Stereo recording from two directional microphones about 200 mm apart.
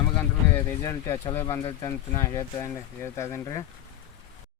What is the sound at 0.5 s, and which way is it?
Speech, 15° left (ahead or behind).